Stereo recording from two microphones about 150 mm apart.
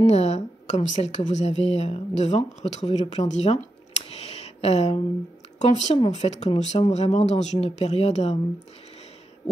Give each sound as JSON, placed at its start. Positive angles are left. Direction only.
{"t": 0.0, "sound": "a woman's voice", "side_deg": 45}